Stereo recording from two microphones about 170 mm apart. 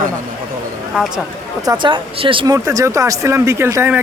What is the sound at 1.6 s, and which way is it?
Speech, 25° right (ahead or behind).